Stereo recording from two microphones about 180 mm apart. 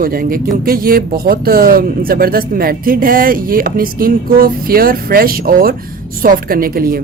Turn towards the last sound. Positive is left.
turn(degrees=-55)  # may be behind; listen again after turning